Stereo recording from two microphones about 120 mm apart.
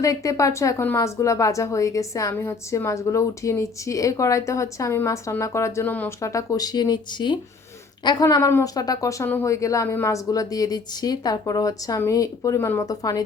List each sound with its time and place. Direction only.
0.0 s a woman's voice: 25° left (ahead or behind)
6.2 s a woman's voice: 25° left (ahead or behind)